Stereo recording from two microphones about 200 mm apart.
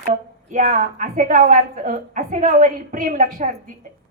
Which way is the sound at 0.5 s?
40° right (ahead or behind).